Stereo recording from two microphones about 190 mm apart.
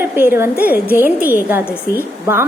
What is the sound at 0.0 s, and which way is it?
A woman's voice, 10° right (ahead or behind).